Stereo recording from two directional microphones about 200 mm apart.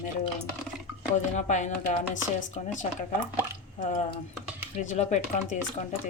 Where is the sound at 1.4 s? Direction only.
35° left (ahead or behind).